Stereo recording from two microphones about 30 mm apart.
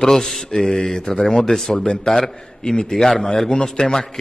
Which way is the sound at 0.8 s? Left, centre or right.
Left.